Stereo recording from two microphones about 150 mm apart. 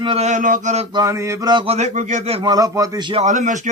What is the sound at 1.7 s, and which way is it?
Speech, 50° right (ahead or behind).